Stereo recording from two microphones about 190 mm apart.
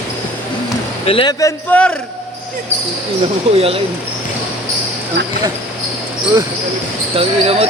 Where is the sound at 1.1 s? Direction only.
30° left (ahead or behind).